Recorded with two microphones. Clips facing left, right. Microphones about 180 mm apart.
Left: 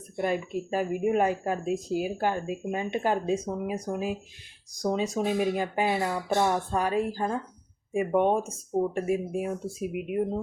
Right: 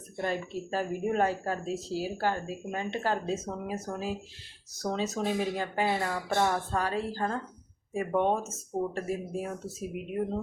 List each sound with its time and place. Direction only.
0.2 s speech: 15° left (ahead or behind)